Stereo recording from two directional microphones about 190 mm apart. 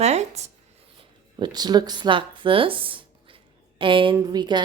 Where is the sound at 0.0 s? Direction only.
35° right (ahead or behind).